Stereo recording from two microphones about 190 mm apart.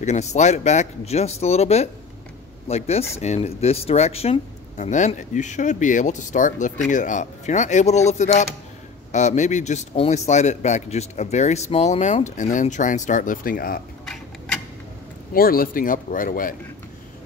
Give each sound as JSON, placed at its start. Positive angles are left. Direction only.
{"t": 0.0, "sound": "speech", "side_deg": 35}
{"t": 15.3, "sound": "speech", "side_deg": 50}